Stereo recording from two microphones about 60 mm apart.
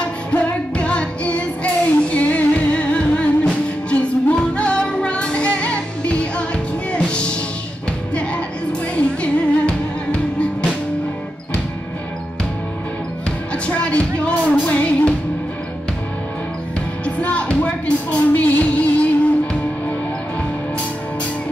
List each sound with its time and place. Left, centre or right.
0.3 s music: left
8.9 s music: centre
13.7 s music: left
17.0 s music: left